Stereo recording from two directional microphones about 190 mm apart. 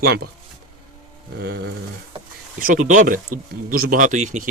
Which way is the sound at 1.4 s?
60° right (ahead or behind).